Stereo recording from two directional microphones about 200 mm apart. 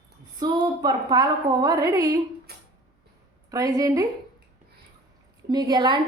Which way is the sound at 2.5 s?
50° right (ahead or behind).